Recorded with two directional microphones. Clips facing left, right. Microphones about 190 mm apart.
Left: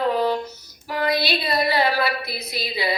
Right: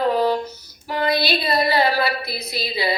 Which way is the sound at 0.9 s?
25° right (ahead or behind).